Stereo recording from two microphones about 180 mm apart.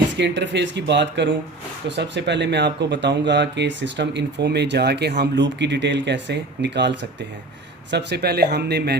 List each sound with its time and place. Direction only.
0.2 s speech: 75° right (ahead or behind)